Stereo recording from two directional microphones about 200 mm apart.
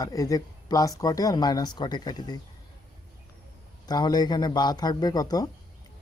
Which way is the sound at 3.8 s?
20° left (ahead or behind).